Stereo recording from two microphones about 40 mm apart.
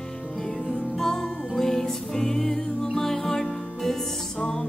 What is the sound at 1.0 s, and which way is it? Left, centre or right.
Music, centre.